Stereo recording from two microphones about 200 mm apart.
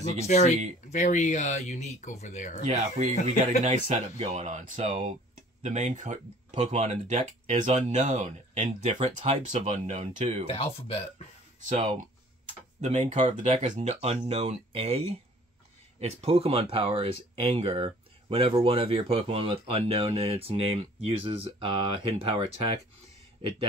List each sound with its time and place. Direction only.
0.9 s speech: 40° left (ahead or behind)
2.7 s speech: 35° right (ahead or behind)
10.4 s speech: 30° left (ahead or behind)
11.7 s speech: 30° right (ahead or behind)